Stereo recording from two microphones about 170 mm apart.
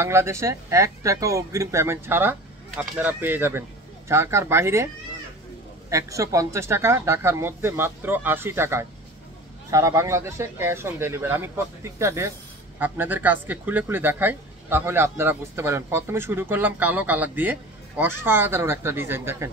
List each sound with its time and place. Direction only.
0.0 s speech: 15° right (ahead or behind)
5.9 s speech: 20° right (ahead or behind)